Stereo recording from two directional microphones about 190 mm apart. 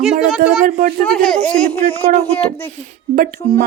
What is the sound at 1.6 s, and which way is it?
Speech, 30° left (ahead or behind).